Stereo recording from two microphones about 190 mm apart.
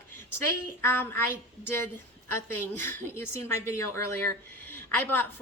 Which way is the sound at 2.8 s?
15° left (ahead or behind).